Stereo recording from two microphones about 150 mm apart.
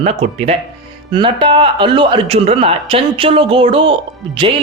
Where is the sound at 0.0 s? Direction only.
45° right (ahead or behind).